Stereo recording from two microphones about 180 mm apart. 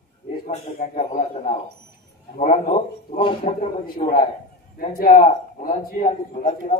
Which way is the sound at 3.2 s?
30° left (ahead or behind).